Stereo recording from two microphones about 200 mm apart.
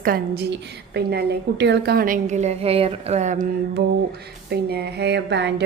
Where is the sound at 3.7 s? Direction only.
55° right (ahead or behind).